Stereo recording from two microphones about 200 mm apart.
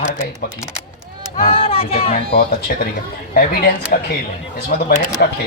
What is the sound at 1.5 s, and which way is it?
Music, 30° left (ahead or behind).